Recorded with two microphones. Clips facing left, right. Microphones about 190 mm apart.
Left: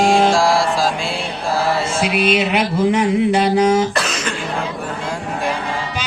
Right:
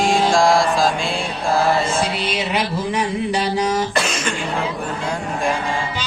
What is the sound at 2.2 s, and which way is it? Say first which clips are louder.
Speech: left 5 dB; 60° left (ahead or behind).